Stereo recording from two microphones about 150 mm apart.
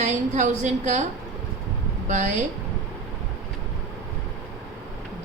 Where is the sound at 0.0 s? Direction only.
55° right (ahead or behind).